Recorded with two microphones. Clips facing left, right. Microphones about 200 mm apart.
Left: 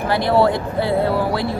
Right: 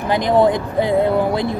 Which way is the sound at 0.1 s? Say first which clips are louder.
Right 2 dB; 15° right (ahead or behind).